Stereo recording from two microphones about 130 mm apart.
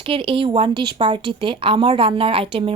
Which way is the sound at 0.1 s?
45° right (ahead or behind).